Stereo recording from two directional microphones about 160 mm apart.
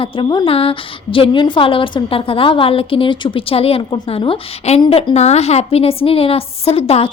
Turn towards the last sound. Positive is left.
turn(degrees=40)  # may be behind; listen again after turning